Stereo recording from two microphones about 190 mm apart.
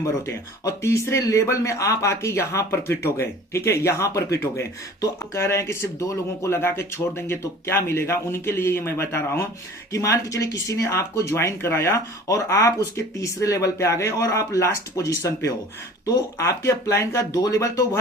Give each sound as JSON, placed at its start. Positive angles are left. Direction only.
{"t": 0.0, "sound": "speech", "side_deg": 15}